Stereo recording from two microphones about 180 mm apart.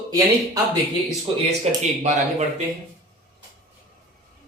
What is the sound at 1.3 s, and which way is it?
Speech, 30° right (ahead or behind).